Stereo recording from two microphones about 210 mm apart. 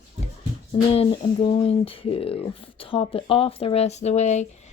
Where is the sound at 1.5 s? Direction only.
25° left (ahead or behind).